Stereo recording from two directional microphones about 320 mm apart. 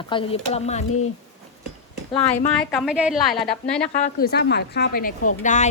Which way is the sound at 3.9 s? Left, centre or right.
Left.